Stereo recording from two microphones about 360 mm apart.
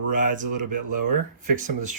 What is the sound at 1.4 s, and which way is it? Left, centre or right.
Speech, right.